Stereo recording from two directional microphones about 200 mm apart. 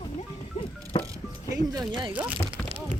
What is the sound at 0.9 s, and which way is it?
Music, 20° left (ahead or behind).